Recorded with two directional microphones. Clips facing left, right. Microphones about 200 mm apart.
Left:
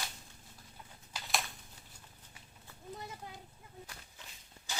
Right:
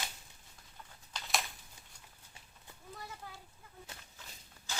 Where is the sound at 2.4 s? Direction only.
25° right (ahead or behind).